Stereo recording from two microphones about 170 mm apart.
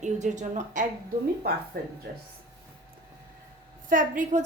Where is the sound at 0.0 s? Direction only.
45° right (ahead or behind).